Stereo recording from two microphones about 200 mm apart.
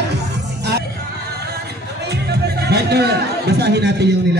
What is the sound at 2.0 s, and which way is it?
Music, 55° right (ahead or behind).